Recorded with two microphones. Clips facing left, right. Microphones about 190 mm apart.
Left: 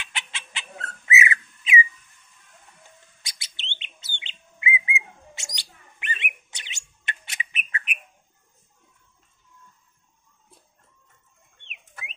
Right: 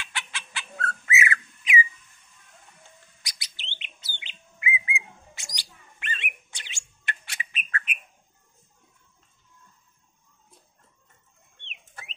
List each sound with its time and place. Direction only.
0.0 s bird: 20° left (ahead or behind)
3.2 s bird: 25° left (ahead or behind)